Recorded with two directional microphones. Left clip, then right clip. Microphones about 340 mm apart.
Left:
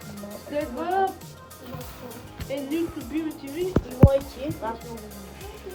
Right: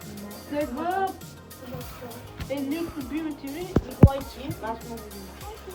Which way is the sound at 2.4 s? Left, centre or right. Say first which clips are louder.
Left 2 dB; centre.